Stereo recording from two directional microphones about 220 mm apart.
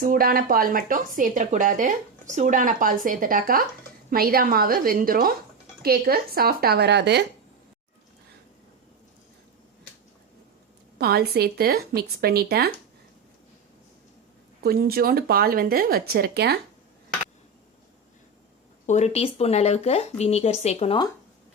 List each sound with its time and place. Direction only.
0.0 s speech: 40° right (ahead or behind)
10.9 s speech: 45° right (ahead or behind)
14.6 s speech: 45° right (ahead or behind)
18.9 s speech: 30° left (ahead or behind)